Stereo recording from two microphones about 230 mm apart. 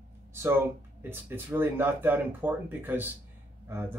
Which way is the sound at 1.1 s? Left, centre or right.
Centre.